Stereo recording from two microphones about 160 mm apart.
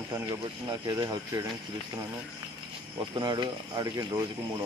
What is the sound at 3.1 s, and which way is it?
Speech, 30° right (ahead or behind).